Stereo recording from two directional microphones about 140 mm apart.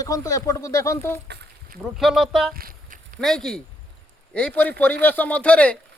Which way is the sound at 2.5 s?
80° right.